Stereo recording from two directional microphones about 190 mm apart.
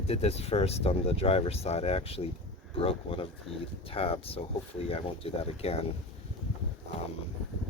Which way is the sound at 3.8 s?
30° left (ahead or behind).